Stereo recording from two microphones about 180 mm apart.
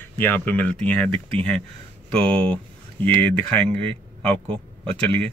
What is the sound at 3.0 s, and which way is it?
Speech, 10° left (ahead or behind).